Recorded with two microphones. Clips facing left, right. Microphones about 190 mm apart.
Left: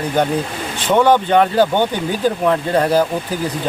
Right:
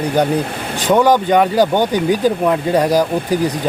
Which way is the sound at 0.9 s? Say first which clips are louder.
Right 1 dB; 10° right (ahead or behind).